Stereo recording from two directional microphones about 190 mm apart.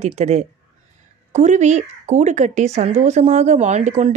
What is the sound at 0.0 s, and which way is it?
Speech, 35° right (ahead or behind).